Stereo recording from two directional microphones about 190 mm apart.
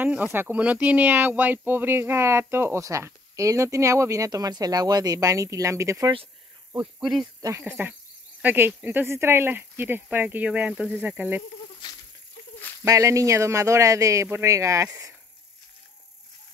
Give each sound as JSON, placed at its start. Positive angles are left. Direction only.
{"t": 0.0, "sound": "speech", "side_deg": -10}
{"t": 7.0, "sound": "speech", "side_deg": 0}
{"t": 7.4, "sound": "speech", "side_deg": -15}
{"t": 12.8, "sound": "speech", "side_deg": -15}